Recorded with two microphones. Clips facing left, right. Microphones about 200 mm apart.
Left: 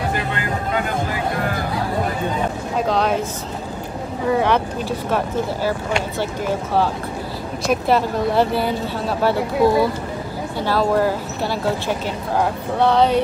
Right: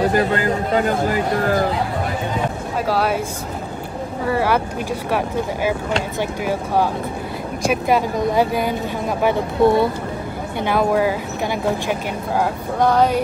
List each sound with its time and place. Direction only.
0.1 s speech: 40° right (ahead or behind)
2.9 s speech: 5° right (ahead or behind)
4.3 s speech: 5° right (ahead or behind)